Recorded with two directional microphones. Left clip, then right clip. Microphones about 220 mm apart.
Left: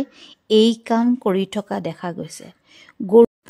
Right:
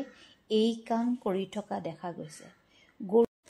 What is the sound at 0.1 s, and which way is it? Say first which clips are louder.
Speech: left 13 dB; 45° left (ahead or behind).